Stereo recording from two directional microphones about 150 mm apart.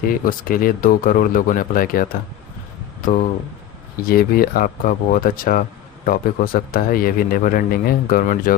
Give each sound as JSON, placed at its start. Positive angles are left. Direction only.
{"t": 0.1, "sound": "speech", "side_deg": 70}
{"t": 3.9, "sound": "speech", "side_deg": 80}